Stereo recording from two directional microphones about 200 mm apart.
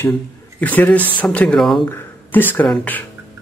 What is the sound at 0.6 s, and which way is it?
Speech, 10° left (ahead or behind).